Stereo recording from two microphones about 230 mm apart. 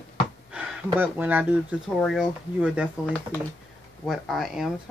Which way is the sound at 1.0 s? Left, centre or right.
Centre.